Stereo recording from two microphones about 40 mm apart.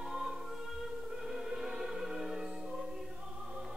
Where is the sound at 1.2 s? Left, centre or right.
Centre.